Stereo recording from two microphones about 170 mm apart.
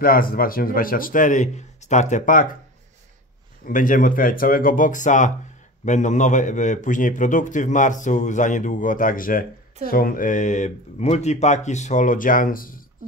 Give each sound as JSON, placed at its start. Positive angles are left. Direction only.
{"t": 0.0, "sound": "a man's voice", "side_deg": 55}
{"t": 3.6, "sound": "a man's voice", "side_deg": 50}